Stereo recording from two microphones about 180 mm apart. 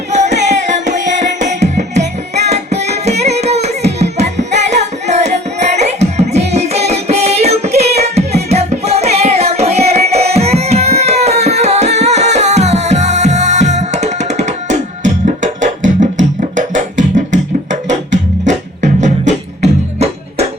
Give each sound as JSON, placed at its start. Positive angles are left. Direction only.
{"t": 0.1, "sound": "music", "side_deg": -40}